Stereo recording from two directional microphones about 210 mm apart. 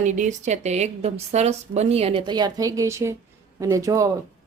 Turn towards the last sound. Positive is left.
turn(degrees=-15)  # may be behind; listen again after turning